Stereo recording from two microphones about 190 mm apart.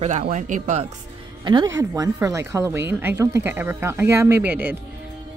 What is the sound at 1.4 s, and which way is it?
Speech, 20° right (ahead or behind).